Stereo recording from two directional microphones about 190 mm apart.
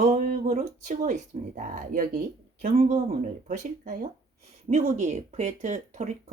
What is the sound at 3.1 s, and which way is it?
Speech, 40° right (ahead or behind).